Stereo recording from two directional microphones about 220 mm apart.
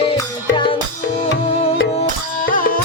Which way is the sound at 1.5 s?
30° left (ahead or behind).